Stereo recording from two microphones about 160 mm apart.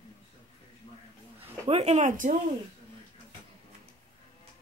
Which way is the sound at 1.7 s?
40° right (ahead or behind).